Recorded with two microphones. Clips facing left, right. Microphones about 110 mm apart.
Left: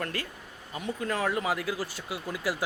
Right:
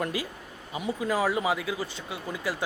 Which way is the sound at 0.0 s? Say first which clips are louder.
Right 4 dB; 10° right (ahead or behind).